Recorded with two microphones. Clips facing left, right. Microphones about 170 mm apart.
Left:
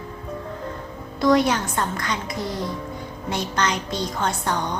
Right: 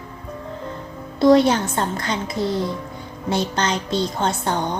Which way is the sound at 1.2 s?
30° right (ahead or behind).